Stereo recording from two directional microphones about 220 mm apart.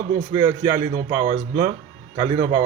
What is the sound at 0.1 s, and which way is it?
Speech, 15° right (ahead or behind).